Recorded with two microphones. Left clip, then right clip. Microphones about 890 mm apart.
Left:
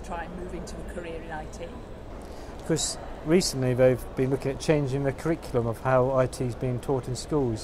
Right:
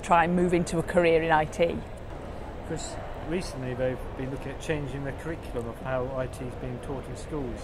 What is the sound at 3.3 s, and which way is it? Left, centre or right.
Speech, left.